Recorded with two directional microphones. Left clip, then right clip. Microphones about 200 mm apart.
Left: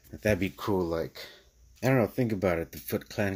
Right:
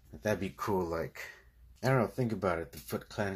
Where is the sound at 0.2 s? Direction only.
35° left (ahead or behind).